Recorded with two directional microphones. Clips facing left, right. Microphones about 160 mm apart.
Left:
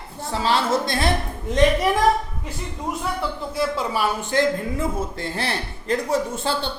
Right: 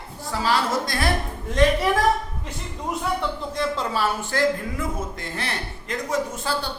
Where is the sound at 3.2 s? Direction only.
5° left (ahead or behind); by 6.7 s 30° left (ahead or behind).